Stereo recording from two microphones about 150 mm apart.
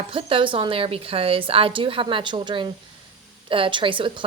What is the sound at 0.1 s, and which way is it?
Speech, 35° right (ahead or behind).